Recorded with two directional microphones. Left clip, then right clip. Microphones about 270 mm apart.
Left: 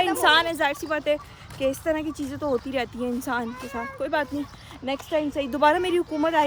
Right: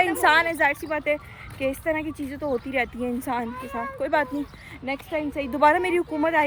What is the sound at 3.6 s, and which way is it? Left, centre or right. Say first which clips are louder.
Speech: right 1 dB; centre.